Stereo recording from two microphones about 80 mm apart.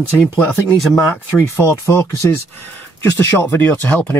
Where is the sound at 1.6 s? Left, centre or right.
Left.